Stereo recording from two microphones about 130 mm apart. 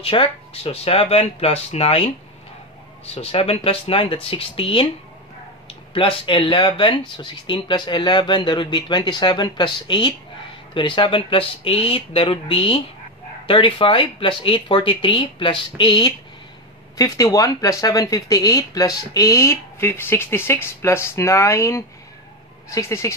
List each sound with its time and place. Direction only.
0.0 s speech: 45° left (ahead or behind)
3.2 s speech: 50° left (ahead or behind)
16.9 s speech: 25° left (ahead or behind)